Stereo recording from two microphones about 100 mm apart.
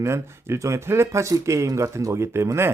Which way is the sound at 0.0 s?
25° right (ahead or behind).